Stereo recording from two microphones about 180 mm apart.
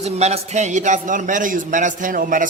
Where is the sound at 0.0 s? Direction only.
35° right (ahead or behind).